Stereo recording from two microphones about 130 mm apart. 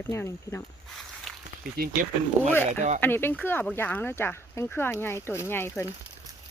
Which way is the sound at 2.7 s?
65° right (ahead or behind).